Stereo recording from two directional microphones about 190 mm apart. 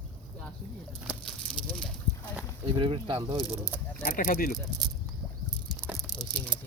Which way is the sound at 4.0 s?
45° left (ahead or behind).